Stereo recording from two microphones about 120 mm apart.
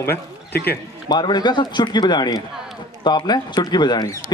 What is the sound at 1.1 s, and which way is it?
Speech, 35° left (ahead or behind).